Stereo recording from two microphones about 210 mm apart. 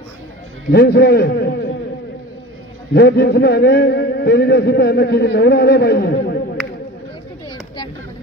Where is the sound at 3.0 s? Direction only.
50° left (ahead or behind).